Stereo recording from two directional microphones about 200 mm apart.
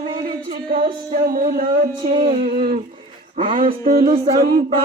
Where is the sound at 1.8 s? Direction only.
35° right (ahead or behind).